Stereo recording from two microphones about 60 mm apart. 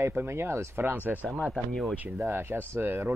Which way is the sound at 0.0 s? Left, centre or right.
Right.